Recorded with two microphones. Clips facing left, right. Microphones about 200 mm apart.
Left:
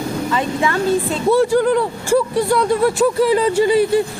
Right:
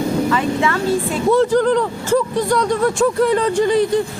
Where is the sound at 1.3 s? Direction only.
10° left (ahead or behind).